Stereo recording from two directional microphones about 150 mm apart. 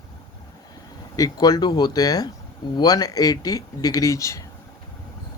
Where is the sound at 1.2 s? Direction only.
25° left (ahead or behind).